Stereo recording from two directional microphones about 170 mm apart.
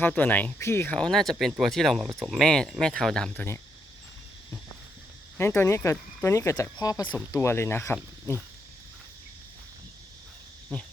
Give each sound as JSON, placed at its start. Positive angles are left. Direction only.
{"t": 0.0, "sound": "speech", "side_deg": 10}
{"t": 5.4, "sound": "speech", "side_deg": 15}